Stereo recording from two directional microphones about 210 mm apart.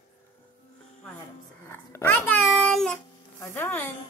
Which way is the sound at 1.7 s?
10° left (ahead or behind).